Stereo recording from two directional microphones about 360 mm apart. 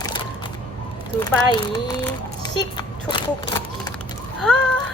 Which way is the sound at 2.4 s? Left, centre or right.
Centre.